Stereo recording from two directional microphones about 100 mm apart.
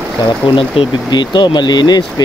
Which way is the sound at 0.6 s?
55° left (ahead or behind).